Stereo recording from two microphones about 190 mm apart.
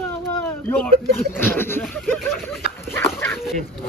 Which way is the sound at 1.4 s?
10° left (ahead or behind).